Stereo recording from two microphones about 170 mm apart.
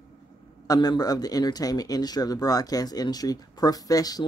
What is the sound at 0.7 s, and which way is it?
Speech, 25° left (ahead or behind).